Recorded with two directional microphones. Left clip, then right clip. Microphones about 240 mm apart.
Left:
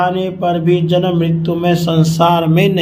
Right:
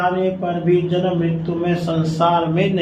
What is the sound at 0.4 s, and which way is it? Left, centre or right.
Speech, left.